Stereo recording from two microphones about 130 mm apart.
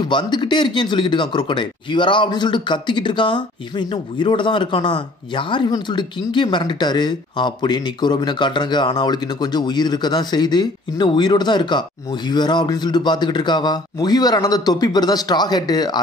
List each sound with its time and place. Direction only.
0.0 s speech: 35° left (ahead or behind)